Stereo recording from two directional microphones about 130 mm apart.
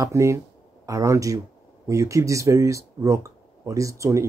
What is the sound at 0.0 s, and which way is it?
Speech, 25° right (ahead or behind).